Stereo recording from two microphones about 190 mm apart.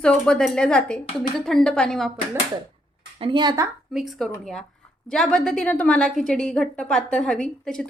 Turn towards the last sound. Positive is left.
turn(degrees=5)  # may be behind; listen again after turning